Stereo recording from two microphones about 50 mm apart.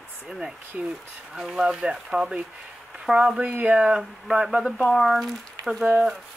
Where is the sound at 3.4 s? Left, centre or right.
Right.